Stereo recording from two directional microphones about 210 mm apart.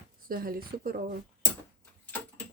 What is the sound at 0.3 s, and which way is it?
Speech, 45° right (ahead or behind).